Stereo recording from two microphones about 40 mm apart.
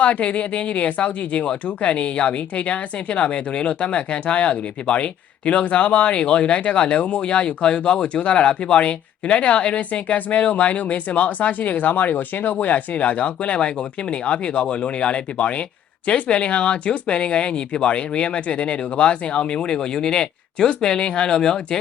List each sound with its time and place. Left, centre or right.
0.0 s speech: left